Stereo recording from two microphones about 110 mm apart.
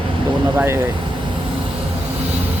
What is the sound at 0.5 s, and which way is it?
Speech, 15° right (ahead or behind).